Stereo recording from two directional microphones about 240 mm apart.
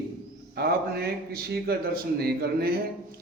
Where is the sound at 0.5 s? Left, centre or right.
Right.